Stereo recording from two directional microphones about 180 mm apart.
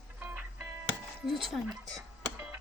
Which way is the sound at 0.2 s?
10° right (ahead or behind).